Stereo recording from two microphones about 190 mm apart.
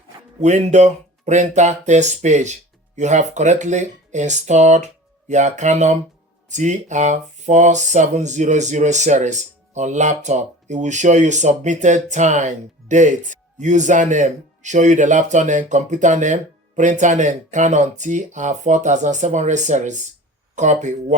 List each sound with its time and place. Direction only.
0.3 s speech: 35° right (ahead or behind)